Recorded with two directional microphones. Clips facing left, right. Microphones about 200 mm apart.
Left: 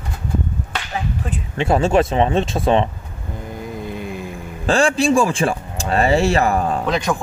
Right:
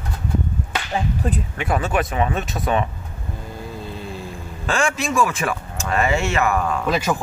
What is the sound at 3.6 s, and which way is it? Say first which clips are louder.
Vehicle: left 5 dB; 15° left (ahead or behind).